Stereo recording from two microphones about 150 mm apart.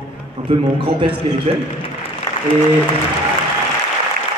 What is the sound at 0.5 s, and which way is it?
Speech, 35° right (ahead or behind).